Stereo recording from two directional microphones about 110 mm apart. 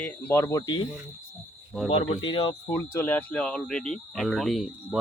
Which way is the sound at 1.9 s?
55° left (ahead or behind).